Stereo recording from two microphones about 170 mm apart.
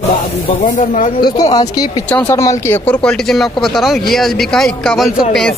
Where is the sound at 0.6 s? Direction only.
50° left (ahead or behind).